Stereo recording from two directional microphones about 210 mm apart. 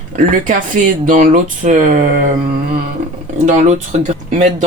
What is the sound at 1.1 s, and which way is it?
Speech, 40° right (ahead or behind).